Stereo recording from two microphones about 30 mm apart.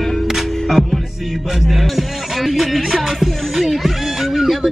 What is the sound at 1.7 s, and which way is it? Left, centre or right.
Music, centre.